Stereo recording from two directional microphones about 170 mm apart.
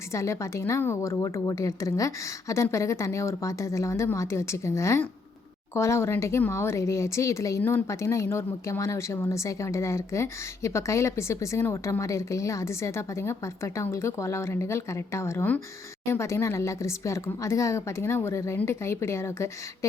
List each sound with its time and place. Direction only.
0.1 s speech: 15° left (ahead or behind)